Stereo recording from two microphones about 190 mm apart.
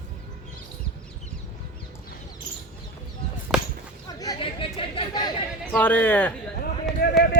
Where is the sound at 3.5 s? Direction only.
Centre (ahead or behind).